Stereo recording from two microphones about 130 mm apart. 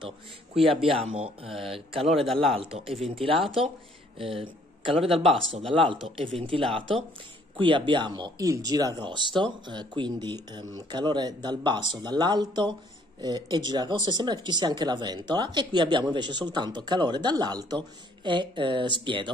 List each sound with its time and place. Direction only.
0.8 s speech: 50° right (ahead or behind)
2.0 s speech: centre (ahead or behind)
2.5 s speech: 45° right (ahead or behind)